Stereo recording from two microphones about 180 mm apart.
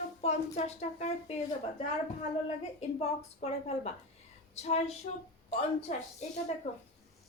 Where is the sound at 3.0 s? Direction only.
35° left (ahead or behind).